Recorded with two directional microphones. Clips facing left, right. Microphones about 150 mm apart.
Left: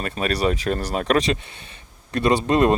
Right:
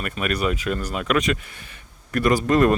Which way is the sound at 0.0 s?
30° left (ahead or behind).